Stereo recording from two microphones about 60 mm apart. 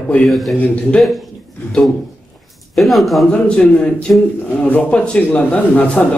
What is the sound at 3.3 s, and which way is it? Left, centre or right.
Speech, centre.